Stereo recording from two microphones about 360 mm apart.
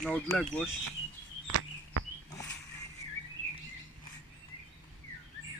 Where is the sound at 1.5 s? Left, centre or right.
Right.